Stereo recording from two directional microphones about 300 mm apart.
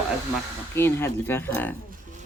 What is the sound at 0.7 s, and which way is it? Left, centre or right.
Speech, centre.